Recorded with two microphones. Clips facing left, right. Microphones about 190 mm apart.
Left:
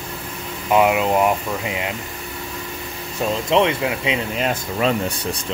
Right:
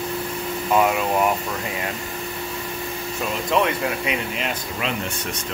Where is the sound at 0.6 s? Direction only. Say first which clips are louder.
Left 3 dB; 15° left (ahead or behind).